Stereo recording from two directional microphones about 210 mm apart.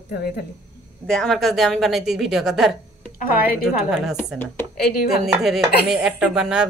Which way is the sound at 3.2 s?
45° left (ahead or behind).